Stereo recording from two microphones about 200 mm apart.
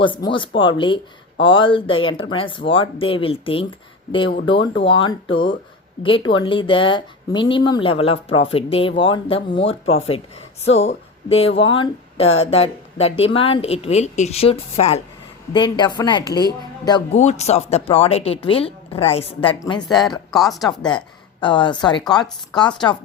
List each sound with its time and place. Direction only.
0.0 s speech: 25° left (ahead or behind)
17.2 s speech: 35° left (ahead or behind)
19.9 s speech: centre (ahead or behind)
20.7 s speech: 20° left (ahead or behind)